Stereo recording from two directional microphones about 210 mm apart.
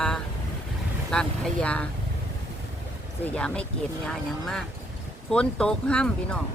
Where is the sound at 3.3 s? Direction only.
5° left (ahead or behind).